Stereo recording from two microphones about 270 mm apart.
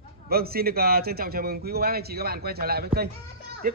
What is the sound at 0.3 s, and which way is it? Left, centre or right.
Speech, right.